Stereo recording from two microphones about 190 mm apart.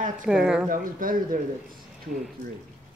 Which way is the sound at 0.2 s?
5° right (ahead or behind).